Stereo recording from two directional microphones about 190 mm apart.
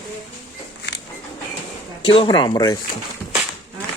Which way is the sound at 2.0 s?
25° left (ahead or behind).